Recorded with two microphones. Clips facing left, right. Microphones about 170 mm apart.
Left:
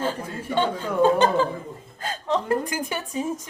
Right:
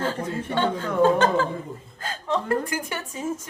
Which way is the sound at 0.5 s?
15° left (ahead or behind).